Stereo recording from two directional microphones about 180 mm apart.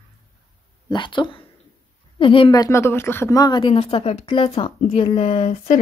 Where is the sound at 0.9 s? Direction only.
25° left (ahead or behind).